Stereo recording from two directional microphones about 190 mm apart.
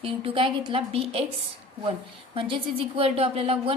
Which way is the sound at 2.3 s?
30° right (ahead or behind).